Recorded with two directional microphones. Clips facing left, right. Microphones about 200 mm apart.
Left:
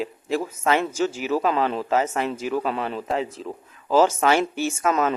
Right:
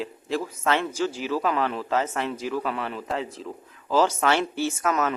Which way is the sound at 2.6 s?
25° left (ahead or behind).